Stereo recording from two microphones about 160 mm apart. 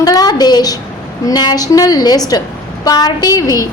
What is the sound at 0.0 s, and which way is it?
A woman's voice, 25° left (ahead or behind).